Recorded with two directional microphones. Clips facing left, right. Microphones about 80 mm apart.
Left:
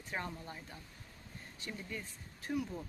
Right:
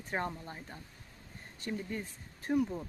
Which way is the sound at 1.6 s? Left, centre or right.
Right.